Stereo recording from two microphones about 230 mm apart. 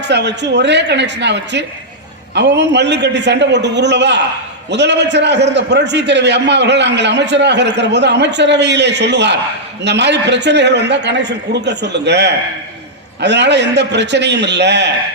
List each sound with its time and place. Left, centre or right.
0.1 s a man's voice: right